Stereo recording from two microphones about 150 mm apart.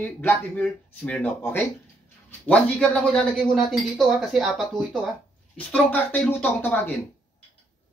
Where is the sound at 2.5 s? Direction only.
5° left (ahead or behind).